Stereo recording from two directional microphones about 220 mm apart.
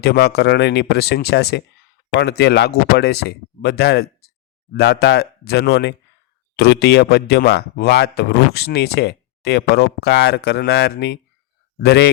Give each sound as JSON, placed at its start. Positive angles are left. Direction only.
{"t": 0.0, "sound": "speech", "side_deg": 50}